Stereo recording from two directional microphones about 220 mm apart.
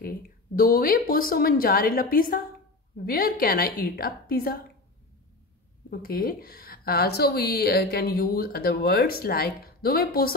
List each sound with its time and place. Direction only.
0.0 s a woman's voice: 40° left (ahead or behind)
5.9 s a woman's voice: 40° left (ahead or behind)